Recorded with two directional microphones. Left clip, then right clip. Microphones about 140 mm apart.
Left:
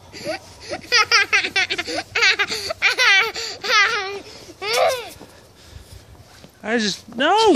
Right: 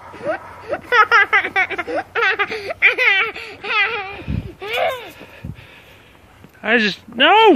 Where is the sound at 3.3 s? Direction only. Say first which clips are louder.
Left 2 dB; 30° left (ahead or behind).